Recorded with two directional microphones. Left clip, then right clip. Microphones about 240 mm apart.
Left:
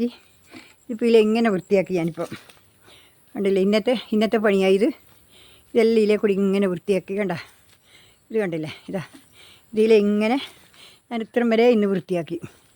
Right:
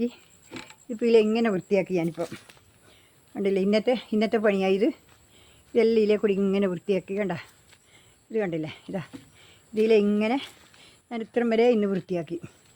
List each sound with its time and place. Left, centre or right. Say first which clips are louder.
0.9 s speech: left 3 dB; left